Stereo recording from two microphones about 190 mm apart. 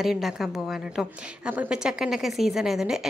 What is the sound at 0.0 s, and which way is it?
A woman's voice, centre (ahead or behind).